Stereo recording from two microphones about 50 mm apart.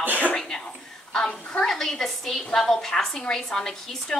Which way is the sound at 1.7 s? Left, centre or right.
Centre.